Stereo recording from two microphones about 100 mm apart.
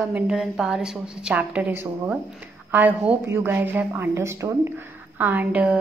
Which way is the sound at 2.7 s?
15° right (ahead or behind).